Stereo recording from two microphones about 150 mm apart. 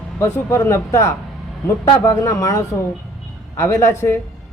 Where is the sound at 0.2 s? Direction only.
15° left (ahead or behind).